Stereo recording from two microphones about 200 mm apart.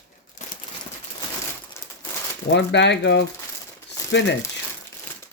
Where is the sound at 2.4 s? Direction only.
60° left (ahead or behind).